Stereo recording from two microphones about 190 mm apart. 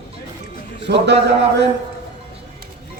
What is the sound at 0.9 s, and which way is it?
Speech, 60° right (ahead or behind).